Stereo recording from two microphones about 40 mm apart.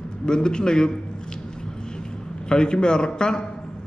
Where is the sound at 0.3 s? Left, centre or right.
Left.